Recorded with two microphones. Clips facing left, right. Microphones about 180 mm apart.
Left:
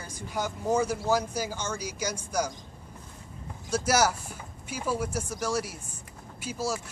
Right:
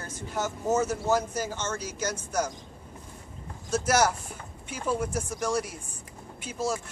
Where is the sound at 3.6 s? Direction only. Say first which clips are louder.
Right 1 dB; 10° left (ahead or behind).